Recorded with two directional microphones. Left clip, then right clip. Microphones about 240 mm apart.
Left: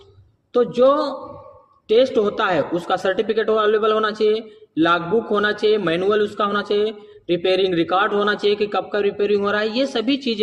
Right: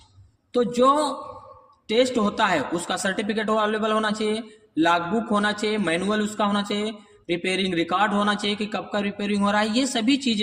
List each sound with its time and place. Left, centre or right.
0.5 s a man's voice: right